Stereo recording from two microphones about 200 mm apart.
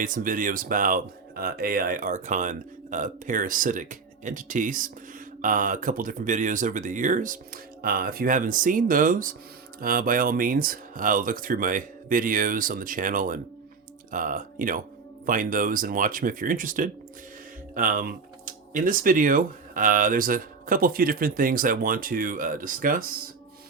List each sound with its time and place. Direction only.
0.0 s speech: 45° right (ahead or behind)